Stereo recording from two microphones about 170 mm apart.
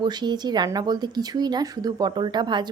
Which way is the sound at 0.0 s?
25° right (ahead or behind).